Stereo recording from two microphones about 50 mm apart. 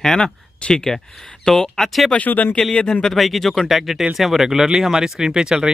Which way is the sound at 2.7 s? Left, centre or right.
Centre.